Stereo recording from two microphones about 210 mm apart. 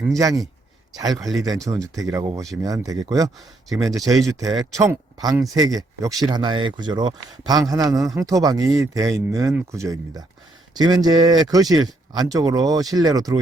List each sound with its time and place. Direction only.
0.2 s speech: 15° right (ahead or behind)
1.2 s speech: centre (ahead or behind)
1.5 s speech: 15° right (ahead or behind)